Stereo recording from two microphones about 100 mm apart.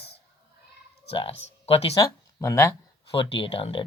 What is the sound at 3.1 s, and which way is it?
Speech, 60° left (ahead or behind).